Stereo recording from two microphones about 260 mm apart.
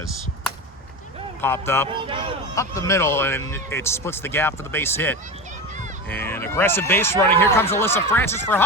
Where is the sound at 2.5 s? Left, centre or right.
Centre.